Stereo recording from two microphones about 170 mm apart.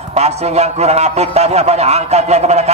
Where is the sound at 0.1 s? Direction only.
40° right (ahead or behind).